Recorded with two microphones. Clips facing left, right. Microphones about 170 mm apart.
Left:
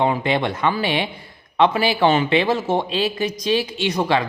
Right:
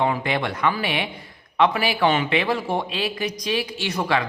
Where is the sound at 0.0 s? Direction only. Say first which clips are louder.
Left 3 dB; 25° left (ahead or behind).